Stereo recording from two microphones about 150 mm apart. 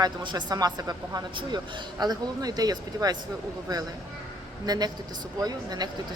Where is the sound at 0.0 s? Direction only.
30° right (ahead or behind).